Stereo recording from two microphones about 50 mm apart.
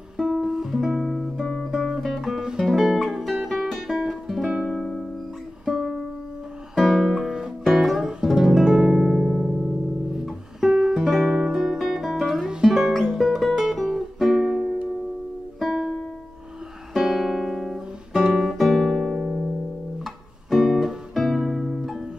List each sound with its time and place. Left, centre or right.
0.2 s music: centre
4.6 s music: centre
10.7 s music: centre
15.7 s music: centre
16.9 s guitar: centre
20.4 s music: centre
21.1 s music: centre